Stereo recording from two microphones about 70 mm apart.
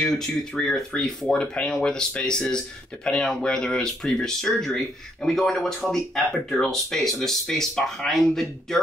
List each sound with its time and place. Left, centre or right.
0.0 s speech: centre